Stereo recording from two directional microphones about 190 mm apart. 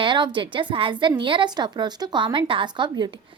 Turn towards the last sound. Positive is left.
turn(degrees=-25)  # may be behind; listen again after turning